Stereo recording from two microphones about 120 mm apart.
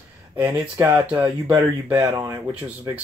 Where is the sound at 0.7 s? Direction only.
20° right (ahead or behind).